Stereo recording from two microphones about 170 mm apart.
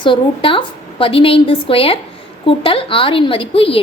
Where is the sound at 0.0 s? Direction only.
30° left (ahead or behind).